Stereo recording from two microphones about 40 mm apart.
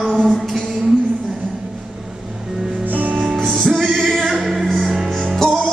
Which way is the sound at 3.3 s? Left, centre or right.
Centre.